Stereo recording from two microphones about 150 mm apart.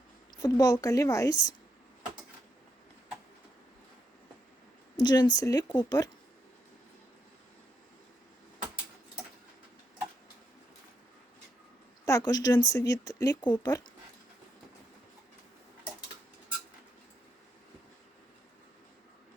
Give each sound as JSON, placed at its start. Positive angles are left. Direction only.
{"t": 0.3, "sound": "speech", "side_deg": 30}
{"t": 4.9, "sound": "speech", "side_deg": 30}
{"t": 12.0, "sound": "speech", "side_deg": 25}